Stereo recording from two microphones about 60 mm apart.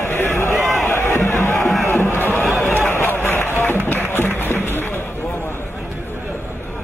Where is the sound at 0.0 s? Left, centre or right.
Left.